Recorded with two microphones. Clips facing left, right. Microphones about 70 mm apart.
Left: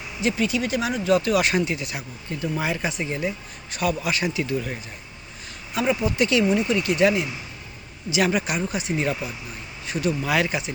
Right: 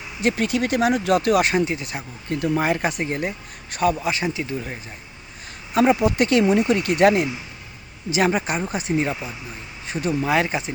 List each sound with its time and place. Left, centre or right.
0.2 s a man's voice: right
1.5 s speech: right
2.3 s a man's voice: right
5.7 s a man's voice: right
8.1 s speech: right